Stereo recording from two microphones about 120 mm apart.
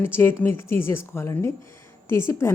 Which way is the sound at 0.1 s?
20° left (ahead or behind).